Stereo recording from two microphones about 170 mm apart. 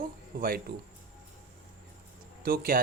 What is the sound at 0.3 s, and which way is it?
Speech, 60° right (ahead or behind).